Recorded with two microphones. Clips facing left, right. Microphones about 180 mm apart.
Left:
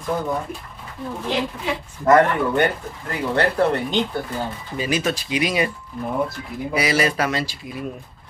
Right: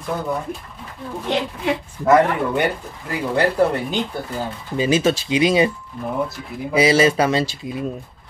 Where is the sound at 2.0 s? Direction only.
10° right (ahead or behind).